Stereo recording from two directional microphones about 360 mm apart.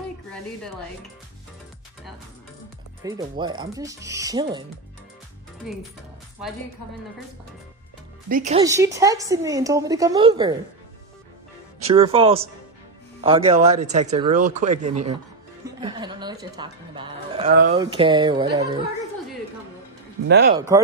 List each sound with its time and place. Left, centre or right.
3.0 s a woman's voice: centre
8.3 s a woman's voice: centre
11.9 s a woman's voice: centre
20.2 s speech: right
20.5 s a woman's voice: centre